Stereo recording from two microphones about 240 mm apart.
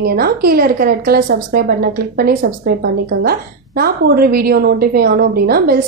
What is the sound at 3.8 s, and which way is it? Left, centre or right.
A woman's voice, right.